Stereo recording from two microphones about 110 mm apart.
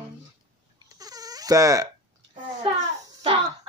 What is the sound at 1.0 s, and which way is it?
Crying, 35° right (ahead or behind).